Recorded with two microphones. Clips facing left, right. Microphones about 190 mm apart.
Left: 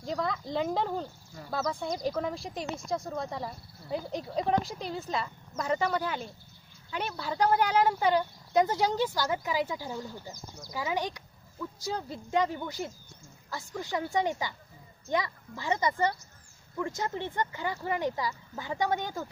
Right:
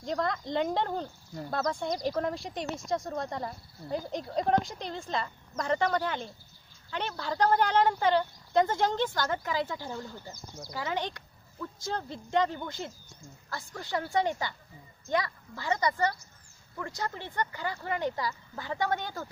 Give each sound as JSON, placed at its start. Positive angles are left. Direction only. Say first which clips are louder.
{"t": 0.0, "sound": "speech", "louder": "right 1 dB", "side_deg": 5}